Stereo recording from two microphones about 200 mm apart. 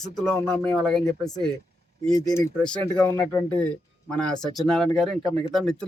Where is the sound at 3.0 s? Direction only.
15° left (ahead or behind).